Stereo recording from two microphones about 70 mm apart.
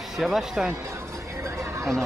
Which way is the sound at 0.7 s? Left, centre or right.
Right.